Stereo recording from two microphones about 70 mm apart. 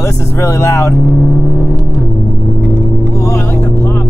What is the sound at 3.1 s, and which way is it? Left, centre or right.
Vehicle, left.